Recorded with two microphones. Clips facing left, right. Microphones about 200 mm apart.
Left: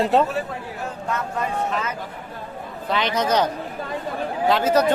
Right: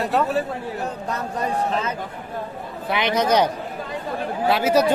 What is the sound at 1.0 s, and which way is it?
Speech, 35° right (ahead or behind).